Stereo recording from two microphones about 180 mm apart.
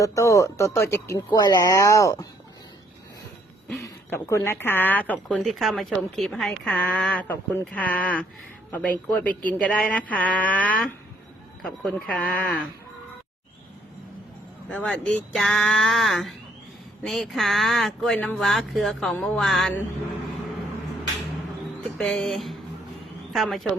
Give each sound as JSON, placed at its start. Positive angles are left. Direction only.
{"t": 0.0, "sound": "a woman's voice", "side_deg": 15}
{"t": 3.8, "sound": "a woman's voice", "side_deg": 15}
{"t": 14.7, "sound": "speech", "side_deg": 5}
{"t": 21.9, "sound": "speech", "side_deg": 5}